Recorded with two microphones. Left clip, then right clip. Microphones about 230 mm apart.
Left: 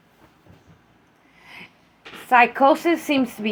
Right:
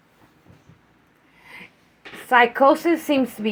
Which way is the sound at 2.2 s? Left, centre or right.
Right.